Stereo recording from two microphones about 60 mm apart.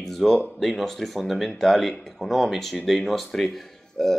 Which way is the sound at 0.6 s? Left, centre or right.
Centre.